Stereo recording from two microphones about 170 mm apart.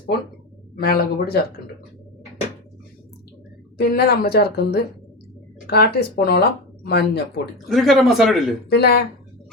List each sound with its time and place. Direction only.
0.8 s speech: 65° left (ahead or behind)
3.8 s speech: 70° left (ahead or behind)
7.7 s a man's voice: centre (ahead or behind)
8.7 s speech: 75° left (ahead or behind)